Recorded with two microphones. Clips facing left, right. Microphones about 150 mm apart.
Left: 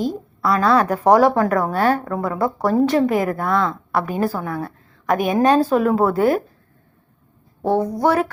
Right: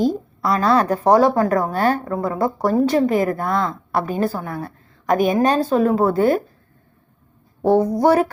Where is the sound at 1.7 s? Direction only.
Centre (ahead or behind).